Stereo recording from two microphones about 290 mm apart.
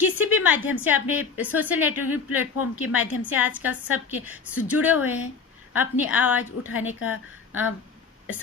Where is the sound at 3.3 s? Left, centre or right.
Centre.